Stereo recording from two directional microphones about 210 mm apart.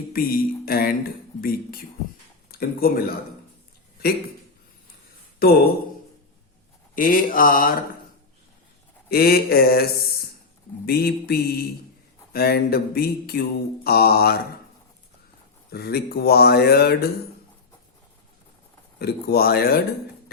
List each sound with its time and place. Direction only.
0.1 s speech: 45° left (ahead or behind)
5.4 s speech: 45° left (ahead or behind)
6.9 s mantra: 40° left (ahead or behind)
9.0 s speech: 45° left (ahead or behind)
10.8 s speech: 50° left (ahead or behind)
15.7 s speech: 50° left (ahead or behind)
18.9 s speech: 50° left (ahead or behind)